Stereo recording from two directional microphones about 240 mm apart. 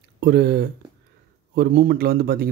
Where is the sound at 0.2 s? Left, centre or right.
Right.